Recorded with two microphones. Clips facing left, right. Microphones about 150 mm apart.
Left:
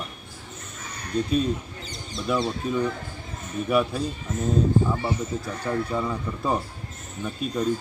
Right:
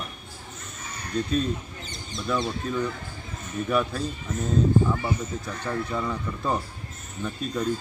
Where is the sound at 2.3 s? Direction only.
10° left (ahead or behind).